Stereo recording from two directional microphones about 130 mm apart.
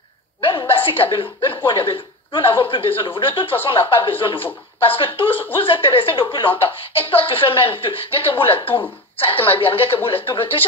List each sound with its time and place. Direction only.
0.4 s chuckle: 45° left (ahead or behind)
1.7 s speech: 40° left (ahead or behind)